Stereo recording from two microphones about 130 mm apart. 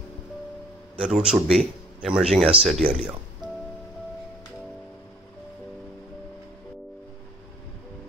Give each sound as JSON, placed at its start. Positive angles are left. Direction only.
{"t": 0.9, "sound": "speech", "side_deg": -5}
{"t": 3.4, "sound": "music", "side_deg": -35}